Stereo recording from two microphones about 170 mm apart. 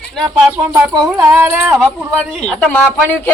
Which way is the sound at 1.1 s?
10° right (ahead or behind).